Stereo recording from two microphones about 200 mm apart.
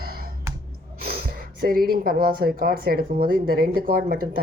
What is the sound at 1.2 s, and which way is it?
Speech, 45° right (ahead or behind).